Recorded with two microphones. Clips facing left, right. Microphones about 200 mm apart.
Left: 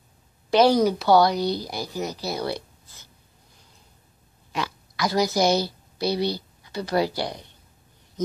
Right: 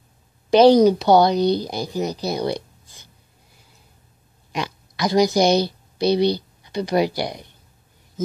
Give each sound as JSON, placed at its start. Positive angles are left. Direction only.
{"t": 0.5, "sound": "a woman's voice", "side_deg": -20}
{"t": 4.5, "sound": "a woman's voice", "side_deg": -20}